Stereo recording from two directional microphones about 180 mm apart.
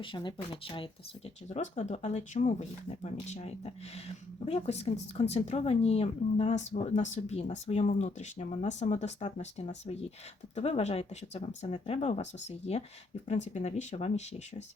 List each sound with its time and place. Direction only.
0.0 s speech: 25° left (ahead or behind)
1.5 s speech: 40° left (ahead or behind)